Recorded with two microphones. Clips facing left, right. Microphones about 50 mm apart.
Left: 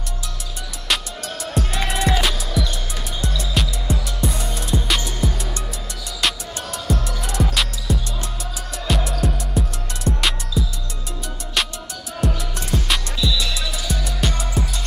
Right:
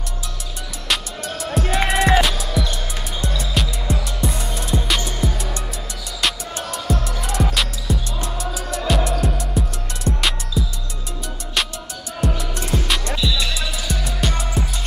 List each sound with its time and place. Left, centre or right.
0.8 s music: centre
12.2 s music: centre